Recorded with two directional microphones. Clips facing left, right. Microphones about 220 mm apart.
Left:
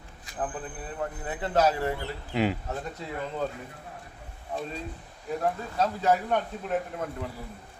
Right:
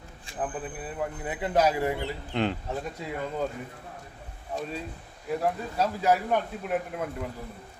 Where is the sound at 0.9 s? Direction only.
10° right (ahead or behind).